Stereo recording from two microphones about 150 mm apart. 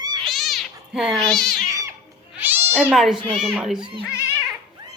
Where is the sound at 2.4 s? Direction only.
10° right (ahead or behind).